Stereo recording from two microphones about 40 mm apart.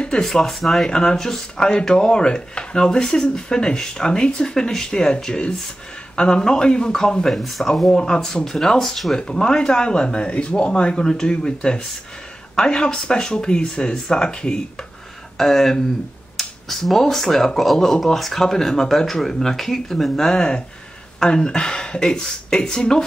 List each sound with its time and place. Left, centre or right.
0.2 s speech: centre
0.8 s speech: centre
7.2 s speech: centre
7.9 s speech: centre
9.3 s speech: centre
15.3 s speech: centre